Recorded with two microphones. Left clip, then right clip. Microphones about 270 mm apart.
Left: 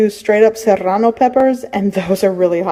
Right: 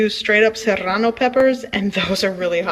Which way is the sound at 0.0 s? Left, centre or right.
Centre.